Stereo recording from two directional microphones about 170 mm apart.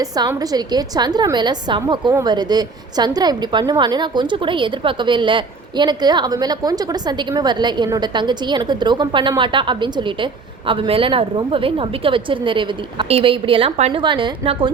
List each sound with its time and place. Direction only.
0.5 s a woman's voice: 25° right (ahead or behind)